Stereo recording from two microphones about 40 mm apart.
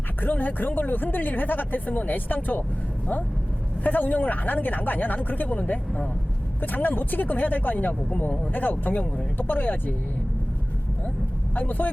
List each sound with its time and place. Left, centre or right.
0.2 s speech: left
3.8 s speech: left
11.5 s speech: left